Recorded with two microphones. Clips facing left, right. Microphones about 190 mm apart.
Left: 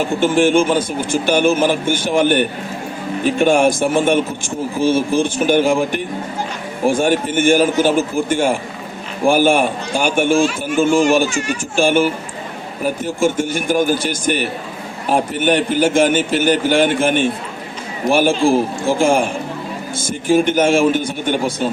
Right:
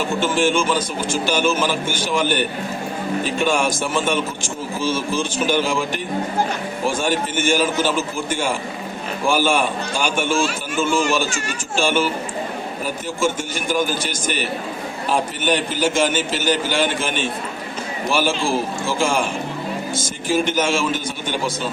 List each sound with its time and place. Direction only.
0.0 s speech: 55° left (ahead or behind)